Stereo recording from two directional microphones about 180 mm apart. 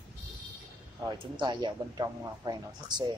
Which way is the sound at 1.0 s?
25° right (ahead or behind).